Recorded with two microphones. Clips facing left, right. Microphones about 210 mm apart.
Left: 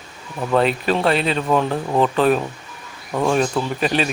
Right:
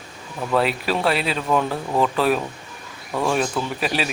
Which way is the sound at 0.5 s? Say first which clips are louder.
Left 3 dB; 5° right (ahead or behind).